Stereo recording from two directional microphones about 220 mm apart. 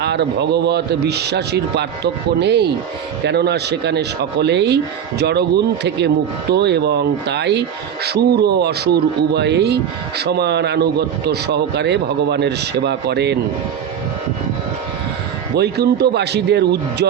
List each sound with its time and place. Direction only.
0.0 s speech: 50° right (ahead or behind)
15.5 s speech: 45° right (ahead or behind)